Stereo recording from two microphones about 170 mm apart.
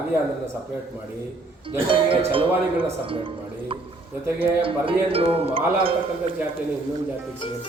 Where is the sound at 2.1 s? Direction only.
30° right (ahead or behind).